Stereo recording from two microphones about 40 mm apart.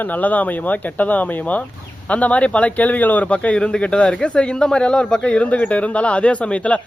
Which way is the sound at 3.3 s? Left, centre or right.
Left.